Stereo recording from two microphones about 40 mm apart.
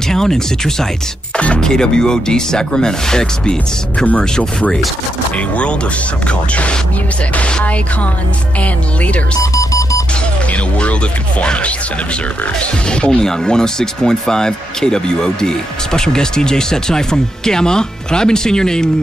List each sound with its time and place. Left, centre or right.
0.1 s speech: centre
1.3 s music: left
1.6 s speech: centre
6.2 s speech: left
9.0 s speech: left
10.5 s speech: left
12.5 s speech: left